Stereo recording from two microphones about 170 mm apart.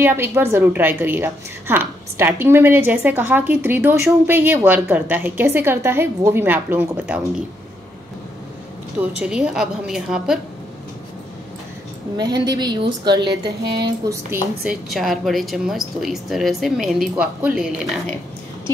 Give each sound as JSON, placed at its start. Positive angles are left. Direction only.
{"t": 0.0, "sound": "a woman's voice", "side_deg": -15}
{"t": 9.1, "sound": "speech", "side_deg": -5}
{"t": 12.2, "sound": "a woman's voice", "side_deg": -25}
{"t": 13.3, "sound": "mantra", "side_deg": -70}
{"t": 14.0, "sound": "a woman's voice", "side_deg": -20}
{"t": 14.9, "sound": "speech", "side_deg": 0}